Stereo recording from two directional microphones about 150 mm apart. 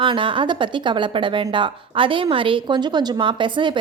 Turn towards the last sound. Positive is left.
turn(degrees=-35)  # may be behind; listen again after turning